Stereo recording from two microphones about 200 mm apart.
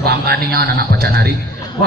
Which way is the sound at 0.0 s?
50° right (ahead or behind).